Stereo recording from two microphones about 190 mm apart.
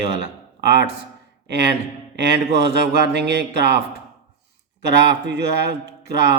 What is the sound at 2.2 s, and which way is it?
A man's voice, 60° right (ahead or behind).